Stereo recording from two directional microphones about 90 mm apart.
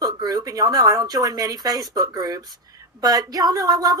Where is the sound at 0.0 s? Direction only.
45° right (ahead or behind).